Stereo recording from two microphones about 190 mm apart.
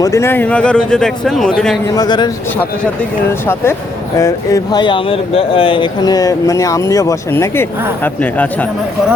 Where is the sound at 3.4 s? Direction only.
15° left (ahead or behind).